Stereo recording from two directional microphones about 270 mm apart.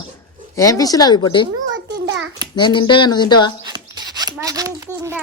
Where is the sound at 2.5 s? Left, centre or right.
Centre.